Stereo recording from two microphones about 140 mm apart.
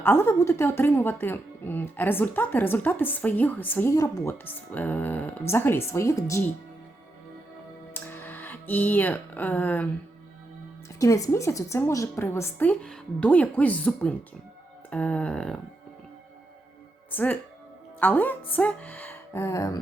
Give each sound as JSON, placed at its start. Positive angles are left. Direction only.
{"t": 0.0, "sound": "a woman's voice", "side_deg": 15}
{"t": 3.9, "sound": "speech", "side_deg": 25}
{"t": 4.3, "sound": "a woman's voice", "side_deg": 10}
{"t": 7.9, "sound": "music", "side_deg": 15}
{"t": 11.0, "sound": "a woman's voice", "side_deg": 25}
{"t": 17.1, "sound": "a woman's voice", "side_deg": 15}